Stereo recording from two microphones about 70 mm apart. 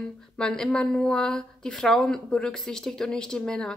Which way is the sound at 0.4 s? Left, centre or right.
Centre.